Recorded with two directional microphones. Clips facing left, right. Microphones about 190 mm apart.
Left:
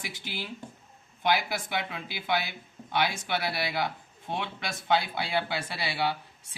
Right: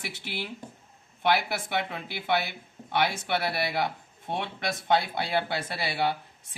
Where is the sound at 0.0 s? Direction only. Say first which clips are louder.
Right 2 dB; 65° right (ahead or behind).